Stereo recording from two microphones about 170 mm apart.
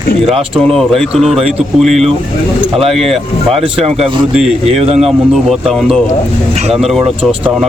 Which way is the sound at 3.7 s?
35° right (ahead or behind).